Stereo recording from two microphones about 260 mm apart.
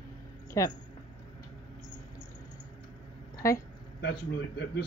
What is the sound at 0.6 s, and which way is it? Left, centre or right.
Speech, centre.